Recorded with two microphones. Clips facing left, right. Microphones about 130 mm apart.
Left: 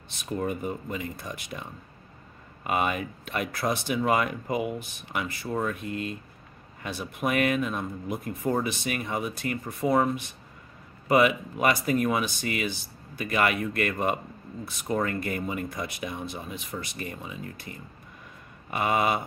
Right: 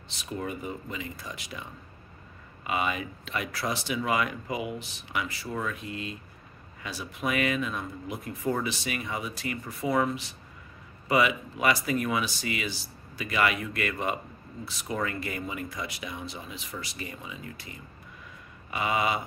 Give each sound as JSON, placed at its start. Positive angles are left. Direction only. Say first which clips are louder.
{"t": 0.4, "sound": "speech", "louder": "left 4 dB", "side_deg": 50}
{"t": 11.1, "sound": "speech", "louder": "left 3 dB", "side_deg": 50}
{"t": 18.7, "sound": "speech", "louder": "left 3 dB", "side_deg": 50}